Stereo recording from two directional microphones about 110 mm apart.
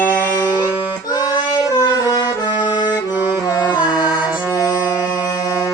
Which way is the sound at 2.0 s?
40° left (ahead or behind).